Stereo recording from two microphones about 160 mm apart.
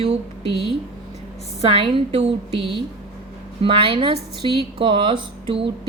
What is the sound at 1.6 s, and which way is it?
A woman's voice, 35° right (ahead or behind).